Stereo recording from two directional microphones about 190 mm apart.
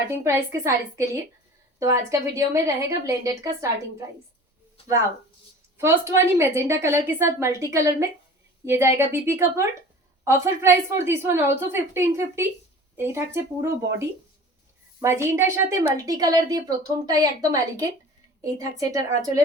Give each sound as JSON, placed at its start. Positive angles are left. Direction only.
{"t": 0.3, "sound": "a woman's voice", "side_deg": -15}
{"t": 5.7, "sound": "a woman's voice", "side_deg": -15}